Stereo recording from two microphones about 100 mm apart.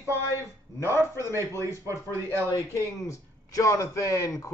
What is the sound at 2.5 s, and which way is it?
Speech, 30° left (ahead or behind).